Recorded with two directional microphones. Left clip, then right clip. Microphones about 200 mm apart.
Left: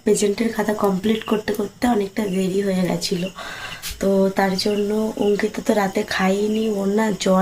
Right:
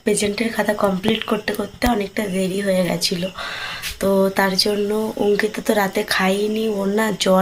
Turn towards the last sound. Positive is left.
turn(degrees=0)  # may be behind; listen again after turning